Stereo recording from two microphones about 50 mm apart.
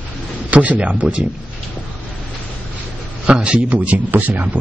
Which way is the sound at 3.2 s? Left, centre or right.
Right.